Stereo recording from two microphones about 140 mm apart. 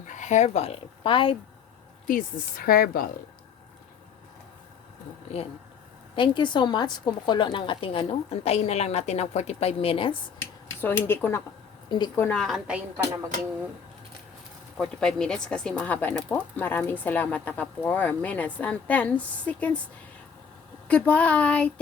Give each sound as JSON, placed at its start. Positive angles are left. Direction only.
{"t": 0.1, "sound": "speech", "side_deg": 60}
{"t": 2.0, "sound": "speech", "side_deg": 85}
{"t": 6.1, "sound": "a woman's voice", "side_deg": 35}
{"t": 10.8, "sound": "speech", "side_deg": 15}
{"t": 11.9, "sound": "a woman's voice", "side_deg": 30}
{"t": 12.1, "sound": "speech", "side_deg": 15}
{"t": 12.4, "sound": "a woman's voice", "side_deg": 0}
{"t": 14.8, "sound": "speech", "side_deg": 5}
{"t": 20.8, "sound": "speech", "side_deg": 10}